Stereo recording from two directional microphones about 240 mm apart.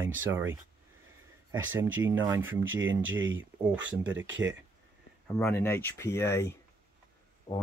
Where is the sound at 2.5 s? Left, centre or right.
Right.